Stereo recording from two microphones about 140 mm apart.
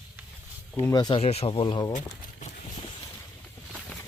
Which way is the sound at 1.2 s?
45° left (ahead or behind).